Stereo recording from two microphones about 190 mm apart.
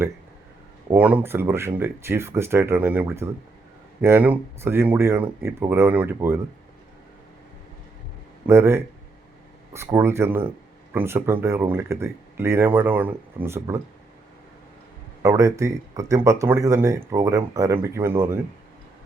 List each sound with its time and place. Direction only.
0.9 s speech: 10° right (ahead or behind)
8.4 s speech: 10° right (ahead or behind)
15.2 s speech: 15° right (ahead or behind)